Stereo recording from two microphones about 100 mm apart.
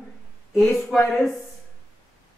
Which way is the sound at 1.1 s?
Centre (ahead or behind).